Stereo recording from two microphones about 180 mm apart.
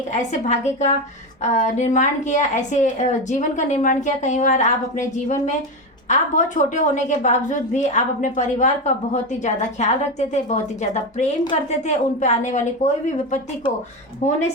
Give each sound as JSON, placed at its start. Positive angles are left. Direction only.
{"t": 0.1, "sound": "a woman's voice", "side_deg": 40}
{"t": 14.2, "sound": "a woman's voice", "side_deg": 40}